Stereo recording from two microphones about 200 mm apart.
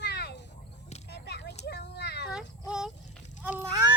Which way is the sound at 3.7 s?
20° right (ahead or behind).